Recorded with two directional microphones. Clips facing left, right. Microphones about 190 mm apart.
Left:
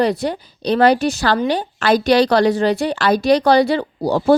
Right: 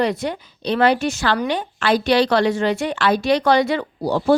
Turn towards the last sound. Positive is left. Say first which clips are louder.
# left 3 dB
turn(degrees=40)  # may be behind; listen again after turning